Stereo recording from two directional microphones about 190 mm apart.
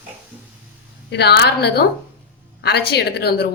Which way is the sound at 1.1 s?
60° left (ahead or behind).